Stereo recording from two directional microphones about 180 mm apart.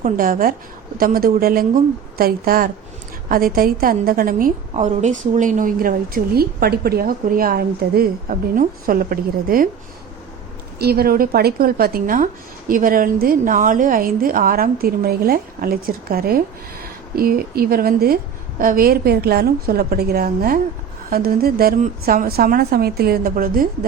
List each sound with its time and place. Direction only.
0.0 s a woman's voice: 50° right (ahead or behind)
10.8 s speech: 60° right (ahead or behind)